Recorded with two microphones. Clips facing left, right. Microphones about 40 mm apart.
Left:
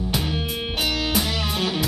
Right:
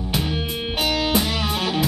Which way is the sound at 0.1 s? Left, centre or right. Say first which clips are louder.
Right 4 dB; centre.